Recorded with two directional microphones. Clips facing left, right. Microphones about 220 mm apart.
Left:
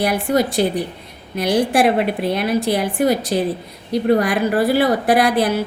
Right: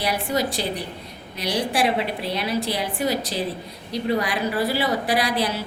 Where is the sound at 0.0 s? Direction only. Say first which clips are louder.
Left 6 dB; 50° left (ahead or behind).